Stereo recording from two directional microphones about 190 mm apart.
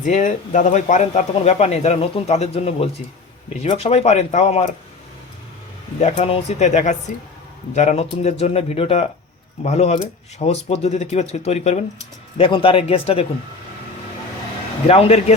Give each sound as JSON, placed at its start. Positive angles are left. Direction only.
{"t": 0.0, "sound": "speech", "side_deg": 40}
{"t": 6.0, "sound": "speech", "side_deg": 35}
{"t": 14.8, "sound": "speech", "side_deg": 35}